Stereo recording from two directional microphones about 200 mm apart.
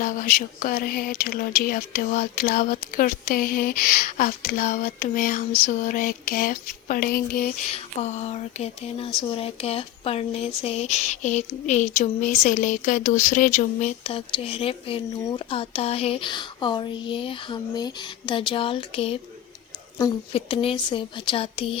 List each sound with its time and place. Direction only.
0.0 s speech: 45° left (ahead or behind); by 21.8 s 25° left (ahead or behind)